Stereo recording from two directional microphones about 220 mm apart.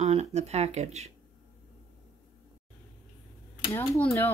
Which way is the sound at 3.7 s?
10° left (ahead or behind).